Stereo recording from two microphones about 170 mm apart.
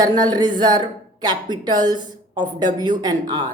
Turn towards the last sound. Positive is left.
turn(degrees=-25)  # may be behind; listen again after turning